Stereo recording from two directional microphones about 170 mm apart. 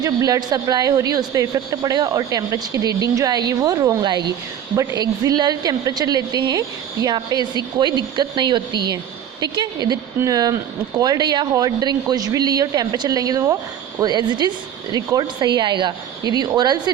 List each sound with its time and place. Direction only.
0.0 s speech: 20° right (ahead or behind)